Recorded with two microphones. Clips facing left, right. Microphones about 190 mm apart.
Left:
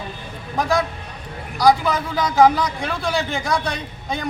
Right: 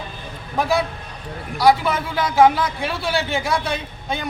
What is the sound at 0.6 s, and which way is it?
A man's voice, 5° right (ahead or behind).